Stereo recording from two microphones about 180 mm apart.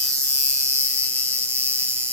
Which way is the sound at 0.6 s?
10° left (ahead or behind).